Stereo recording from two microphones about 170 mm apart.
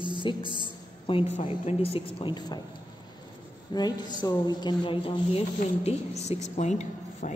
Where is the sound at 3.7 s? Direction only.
25° left (ahead or behind); by 7.3 s 45° left (ahead or behind).